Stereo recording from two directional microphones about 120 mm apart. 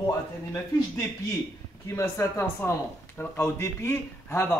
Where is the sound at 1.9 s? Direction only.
20° left (ahead or behind).